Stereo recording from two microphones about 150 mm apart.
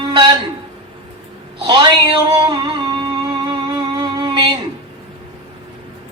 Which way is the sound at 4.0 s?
30° right (ahead or behind).